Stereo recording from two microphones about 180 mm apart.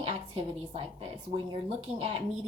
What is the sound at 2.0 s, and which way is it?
Speech, 30° right (ahead or behind).